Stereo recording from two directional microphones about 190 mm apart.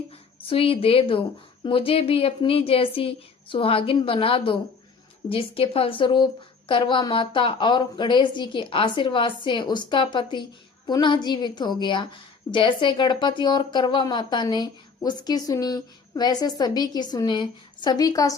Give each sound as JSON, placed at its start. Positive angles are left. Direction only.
{"t": 0.4, "sound": "a woman's voice", "side_deg": 30}